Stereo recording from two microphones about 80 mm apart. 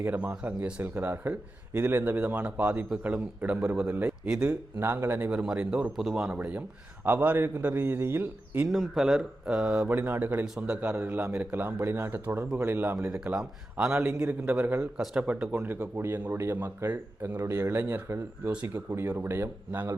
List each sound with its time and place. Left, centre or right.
0.0 s a man's voice: right
4.8 s speech: right
5.3 s a man's voice: centre
6.3 s a man's voice: centre
8.6 s speech: centre
10.0 s speech: right
10.4 s a man's voice: centre
11.8 s speech: right
13.0 s a man's voice: centre
17.4 s speech: right